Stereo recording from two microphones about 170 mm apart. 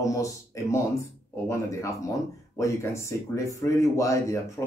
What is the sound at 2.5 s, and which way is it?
Speech, 15° left (ahead or behind).